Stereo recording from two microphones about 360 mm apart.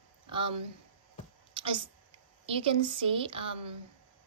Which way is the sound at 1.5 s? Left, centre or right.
Centre.